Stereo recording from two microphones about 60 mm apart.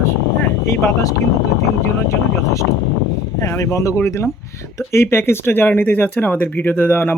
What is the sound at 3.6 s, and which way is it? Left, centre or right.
Speech, left.